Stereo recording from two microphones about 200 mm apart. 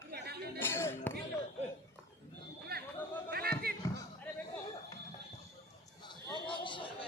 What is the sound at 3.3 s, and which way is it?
Basketball bounce, 50° right (ahead or behind).